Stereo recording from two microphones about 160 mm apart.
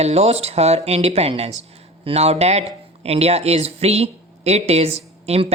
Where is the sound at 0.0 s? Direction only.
40° right (ahead or behind).